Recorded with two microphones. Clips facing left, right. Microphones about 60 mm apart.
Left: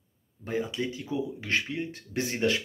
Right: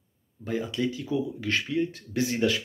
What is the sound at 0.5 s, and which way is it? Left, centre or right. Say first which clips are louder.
Speech: right 2 dB; left.